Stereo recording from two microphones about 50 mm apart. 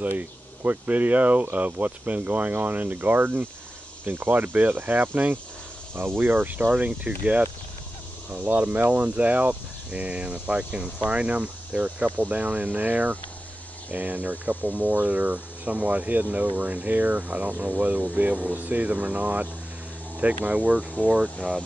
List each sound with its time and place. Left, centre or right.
0.2 s speech: right
6.7 s speech: right